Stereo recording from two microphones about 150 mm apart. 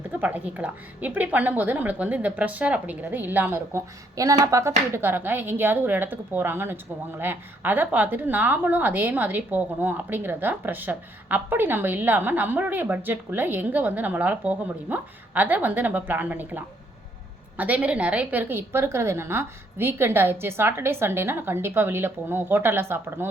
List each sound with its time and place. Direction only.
0.1 s a woman's voice: 10° right (ahead or behind)